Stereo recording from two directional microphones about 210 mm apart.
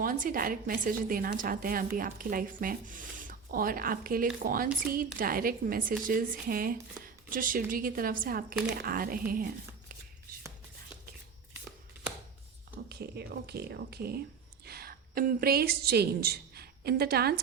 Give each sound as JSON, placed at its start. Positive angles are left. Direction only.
{"t": 0.0, "sound": "a woman's voice", "side_deg": -40}
{"t": 12.9, "sound": "a woman's voice", "side_deg": -50}